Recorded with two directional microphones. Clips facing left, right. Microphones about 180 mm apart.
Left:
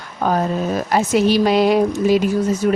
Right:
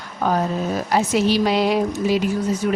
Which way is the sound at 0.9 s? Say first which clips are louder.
Left 3 dB; 50° left (ahead or behind).